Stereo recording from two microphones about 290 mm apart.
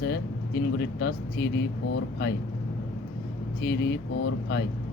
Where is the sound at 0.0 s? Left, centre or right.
Left.